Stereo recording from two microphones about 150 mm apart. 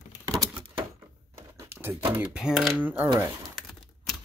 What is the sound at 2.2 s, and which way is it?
Speech, 5° right (ahead or behind).